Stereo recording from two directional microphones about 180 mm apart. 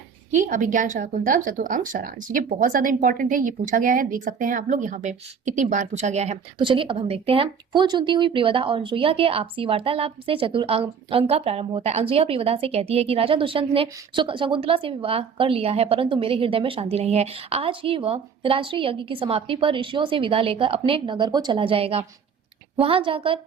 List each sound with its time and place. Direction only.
0.3 s a woman's voice: 45° right (ahead or behind); by 23.4 s 30° right (ahead or behind)